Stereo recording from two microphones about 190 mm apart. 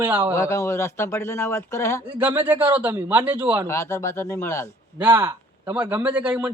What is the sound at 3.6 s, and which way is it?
Speech, 15° left (ahead or behind).